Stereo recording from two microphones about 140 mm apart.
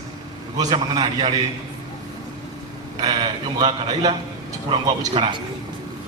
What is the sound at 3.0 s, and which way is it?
A man's voice, 30° right (ahead or behind).